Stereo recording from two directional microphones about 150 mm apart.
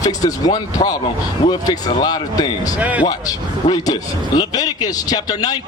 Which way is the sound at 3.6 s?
25° left (ahead or behind).